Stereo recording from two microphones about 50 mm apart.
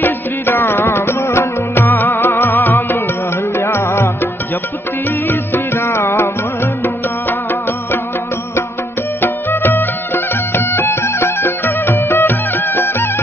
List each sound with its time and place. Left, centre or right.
0.0 s music: left
3.5 s music: left
5.3 s music: left
9.2 s music: left